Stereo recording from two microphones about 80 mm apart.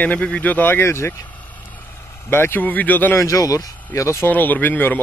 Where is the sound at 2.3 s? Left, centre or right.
Left.